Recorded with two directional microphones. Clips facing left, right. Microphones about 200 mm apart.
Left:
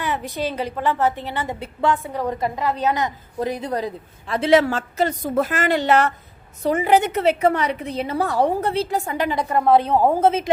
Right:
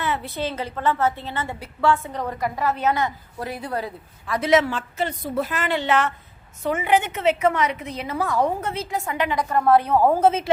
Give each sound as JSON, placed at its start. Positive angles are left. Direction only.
{"t": 0.0, "sound": "a woman's voice", "side_deg": 15}
{"t": 4.4, "sound": "a woman's voice", "side_deg": 30}
{"t": 4.6, "sound": "a woman's voice", "side_deg": 40}
{"t": 9.5, "sound": "a woman's voice", "side_deg": 10}
{"t": 9.8, "sound": "a woman's voice", "side_deg": 25}
{"t": 10.1, "sound": "a woman's voice", "side_deg": 10}